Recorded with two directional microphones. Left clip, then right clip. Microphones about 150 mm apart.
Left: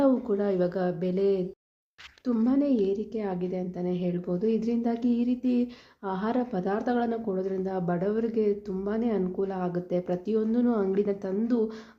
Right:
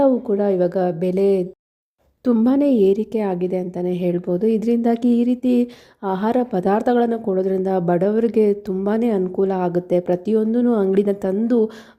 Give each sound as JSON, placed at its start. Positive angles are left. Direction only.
{"t": 0.0, "sound": "a woman's voice", "side_deg": -40}